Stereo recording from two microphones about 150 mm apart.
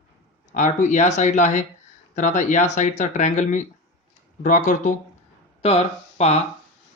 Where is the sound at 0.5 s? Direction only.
55° left (ahead or behind).